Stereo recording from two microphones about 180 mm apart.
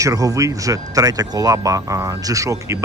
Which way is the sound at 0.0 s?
20° right (ahead or behind).